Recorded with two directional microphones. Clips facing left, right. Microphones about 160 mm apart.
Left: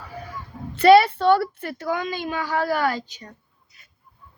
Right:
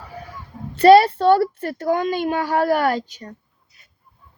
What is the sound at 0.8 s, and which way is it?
A child's voice, 40° right (ahead or behind).